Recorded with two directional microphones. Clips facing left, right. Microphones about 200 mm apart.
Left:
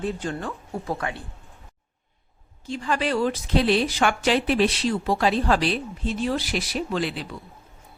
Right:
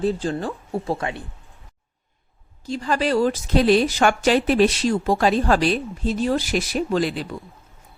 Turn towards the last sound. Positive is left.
turn(degrees=-40)  # may be behind; listen again after turning